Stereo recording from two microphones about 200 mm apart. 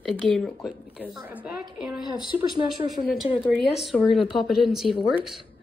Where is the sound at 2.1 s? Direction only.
20° left (ahead or behind).